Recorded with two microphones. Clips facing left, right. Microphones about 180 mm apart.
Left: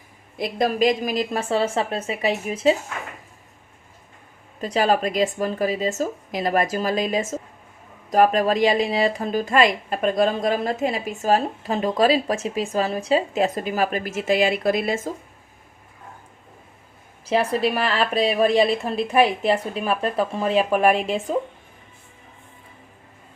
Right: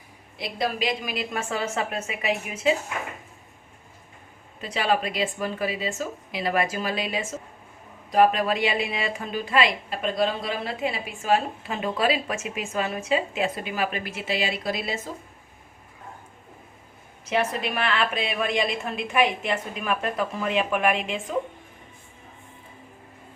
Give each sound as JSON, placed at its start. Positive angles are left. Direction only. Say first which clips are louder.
{"t": 0.3, "sound": "a woman's voice", "louder": "left 6 dB", "side_deg": 50}
{"t": 4.6, "sound": "a woman's voice", "louder": "left 5 dB", "side_deg": 40}
{"t": 17.2, "sound": "a woman's voice", "louder": "left 5 dB", "side_deg": 35}